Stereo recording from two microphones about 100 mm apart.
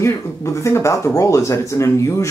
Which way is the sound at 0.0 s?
25° left (ahead or behind).